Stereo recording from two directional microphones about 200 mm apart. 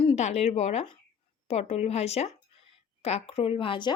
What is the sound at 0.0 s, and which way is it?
Speech, 30° left (ahead or behind).